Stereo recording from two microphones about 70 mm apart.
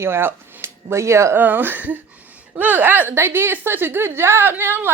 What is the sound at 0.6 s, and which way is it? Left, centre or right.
Speech, right.